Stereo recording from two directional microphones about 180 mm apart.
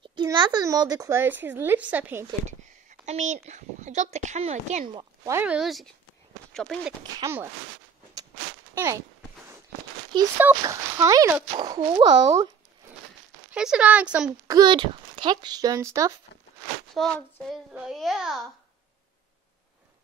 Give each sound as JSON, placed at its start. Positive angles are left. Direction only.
{"t": 0.0, "sound": "speech", "side_deg": -25}
{"t": 2.4, "sound": "a child's voice", "side_deg": -40}
{"t": 4.8, "sound": "speech", "side_deg": -25}
{"t": 5.3, "sound": "a child's voice", "side_deg": -10}
{"t": 7.2, "sound": "speech", "side_deg": -15}
{"t": 8.7, "sound": "speech", "side_deg": -15}
{"t": 10.1, "sound": "speech", "side_deg": -25}
{"t": 13.5, "sound": "a child's voice", "side_deg": -5}
{"t": 14.5, "sound": "speech", "side_deg": -25}
{"t": 16.9, "sound": "a child's voice", "side_deg": 0}